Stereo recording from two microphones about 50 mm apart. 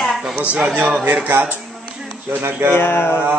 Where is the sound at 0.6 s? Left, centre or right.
Right.